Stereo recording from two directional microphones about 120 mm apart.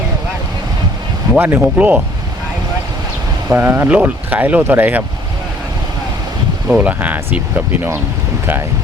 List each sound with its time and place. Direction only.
1.4 s speech: 20° right (ahead or behind)
3.5 s speech: 20° right (ahead or behind)
6.7 s speech: 10° right (ahead or behind)